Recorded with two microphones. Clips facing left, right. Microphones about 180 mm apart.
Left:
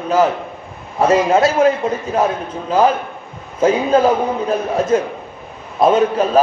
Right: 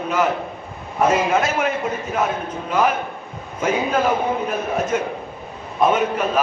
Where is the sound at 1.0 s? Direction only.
30° left (ahead or behind).